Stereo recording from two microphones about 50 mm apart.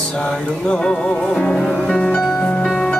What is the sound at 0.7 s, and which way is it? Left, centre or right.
Music, centre.